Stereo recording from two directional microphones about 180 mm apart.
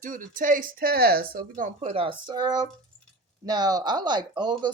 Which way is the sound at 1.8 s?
30° right (ahead or behind).